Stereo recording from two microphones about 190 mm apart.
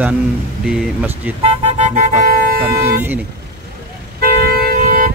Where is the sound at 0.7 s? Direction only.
5° right (ahead or behind).